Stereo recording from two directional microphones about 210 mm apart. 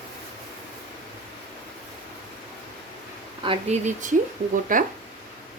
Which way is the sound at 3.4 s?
30° right (ahead or behind).